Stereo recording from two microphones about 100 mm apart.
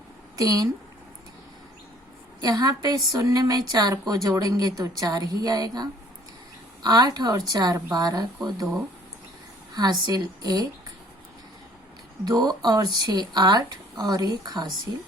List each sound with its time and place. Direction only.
0.3 s a woman's voice: 40° right (ahead or behind)
2.4 s a woman's voice: 40° right (ahead or behind)
9.7 s a woman's voice: 40° right (ahead or behind)
12.2 s speech: 40° right (ahead or behind)